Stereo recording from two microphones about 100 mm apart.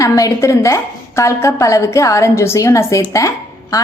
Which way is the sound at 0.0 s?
35° left (ahead or behind).